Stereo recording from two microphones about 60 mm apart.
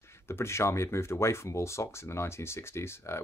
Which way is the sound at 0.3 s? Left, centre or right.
Left.